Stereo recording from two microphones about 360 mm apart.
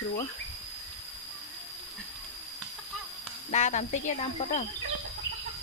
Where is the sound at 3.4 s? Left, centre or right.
Centre.